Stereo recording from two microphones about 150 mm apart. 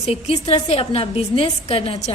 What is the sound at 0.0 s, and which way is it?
A woman's voice, 40° left (ahead or behind).